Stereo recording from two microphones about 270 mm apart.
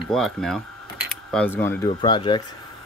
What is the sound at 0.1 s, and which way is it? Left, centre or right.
Speech, centre.